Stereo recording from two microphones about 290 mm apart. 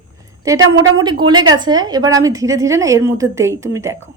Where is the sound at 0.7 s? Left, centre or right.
Centre.